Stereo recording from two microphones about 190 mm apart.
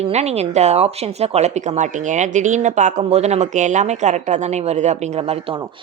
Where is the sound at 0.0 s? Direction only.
35° right (ahead or behind).